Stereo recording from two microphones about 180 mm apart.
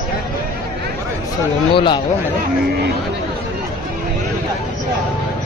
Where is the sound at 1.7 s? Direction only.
30° left (ahead or behind).